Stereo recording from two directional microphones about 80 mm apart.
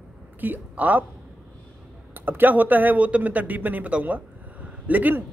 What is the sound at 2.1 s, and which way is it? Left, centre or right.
A man's voice, right.